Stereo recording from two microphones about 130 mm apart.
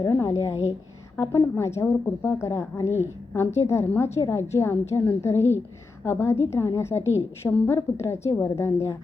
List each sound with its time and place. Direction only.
0.1 s a woman's voice: 20° left (ahead or behind)
7.4 s a woman's voice: 10° left (ahead or behind)
7.8 s a woman's voice: 20° left (ahead or behind)